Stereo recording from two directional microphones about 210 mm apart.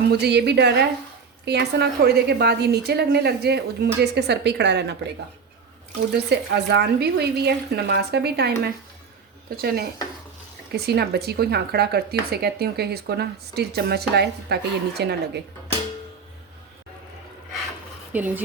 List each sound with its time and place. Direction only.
0.1 s speech: 50° right (ahead or behind)
6.1 s speech: 50° right (ahead or behind)
18.1 s speech: 10° right (ahead or behind)